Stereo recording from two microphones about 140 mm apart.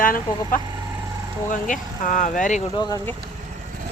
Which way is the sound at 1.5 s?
65° left (ahead or behind).